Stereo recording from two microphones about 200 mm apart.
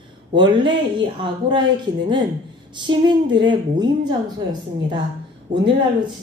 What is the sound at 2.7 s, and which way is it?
A woman's voice, 25° right (ahead or behind).